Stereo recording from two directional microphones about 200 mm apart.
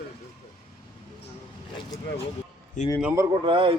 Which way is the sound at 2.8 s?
40° left (ahead or behind).